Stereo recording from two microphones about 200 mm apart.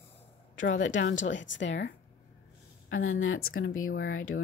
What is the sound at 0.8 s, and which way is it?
A woman's voice, 70° left (ahead or behind).